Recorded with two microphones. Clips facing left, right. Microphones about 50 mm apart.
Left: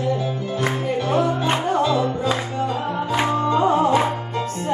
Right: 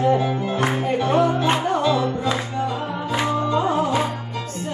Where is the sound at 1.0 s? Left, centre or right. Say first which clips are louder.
Right 1 dB; centre.